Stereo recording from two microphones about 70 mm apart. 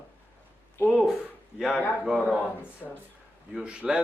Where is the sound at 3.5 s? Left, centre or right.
Centre.